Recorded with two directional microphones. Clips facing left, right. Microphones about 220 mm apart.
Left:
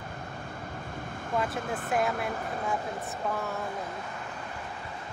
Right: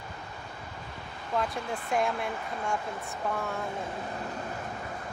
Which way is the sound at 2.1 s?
50° left (ahead or behind).